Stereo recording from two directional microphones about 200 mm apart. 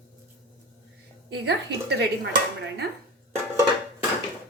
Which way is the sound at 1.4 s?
55° right (ahead or behind).